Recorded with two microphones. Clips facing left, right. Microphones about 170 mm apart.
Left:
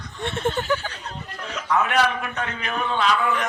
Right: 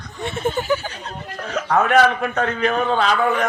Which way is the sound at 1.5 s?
50° right (ahead or behind).